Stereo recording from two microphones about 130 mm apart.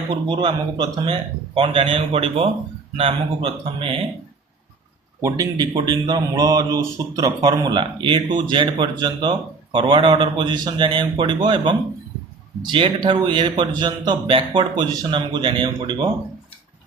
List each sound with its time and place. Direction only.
0.1 s speech: 40° right (ahead or behind)
5.2 s speech: 30° right (ahead or behind)